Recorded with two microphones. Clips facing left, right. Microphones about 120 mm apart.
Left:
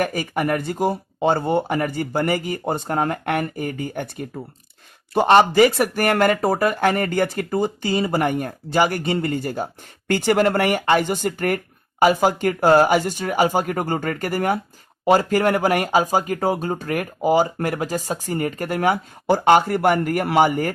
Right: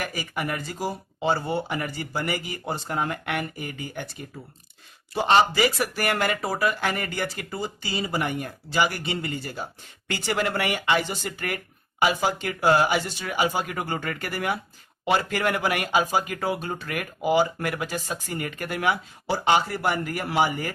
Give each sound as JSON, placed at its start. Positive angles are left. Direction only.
{"t": 0.0, "sound": "speech", "side_deg": 50}